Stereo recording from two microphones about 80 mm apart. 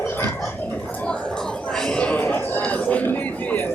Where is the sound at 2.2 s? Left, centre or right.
Left.